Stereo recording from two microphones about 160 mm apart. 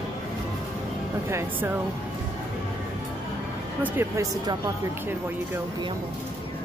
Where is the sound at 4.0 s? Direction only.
15° right (ahead or behind).